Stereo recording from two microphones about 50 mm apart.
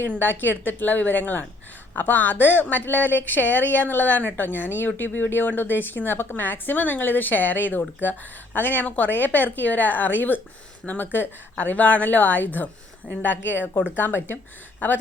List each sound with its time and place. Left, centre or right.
0.2 s a woman's voice: left